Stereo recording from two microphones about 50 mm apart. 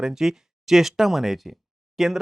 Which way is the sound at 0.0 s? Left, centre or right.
Centre.